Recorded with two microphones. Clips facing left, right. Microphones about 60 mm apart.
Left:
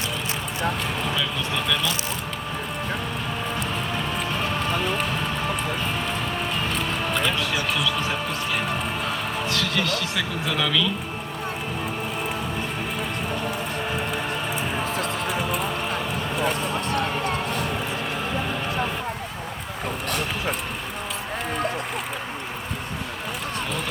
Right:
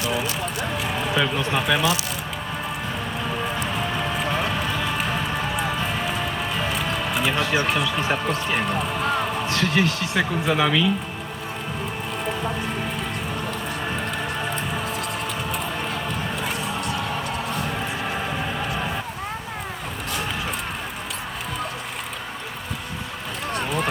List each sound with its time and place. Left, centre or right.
1.1 s speech: right
7.3 s speech: right
7.5 s speech: right
7.8 s speech: right
16.9 s a sound: left